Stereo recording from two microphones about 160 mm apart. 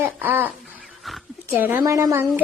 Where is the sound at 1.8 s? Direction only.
20° right (ahead or behind).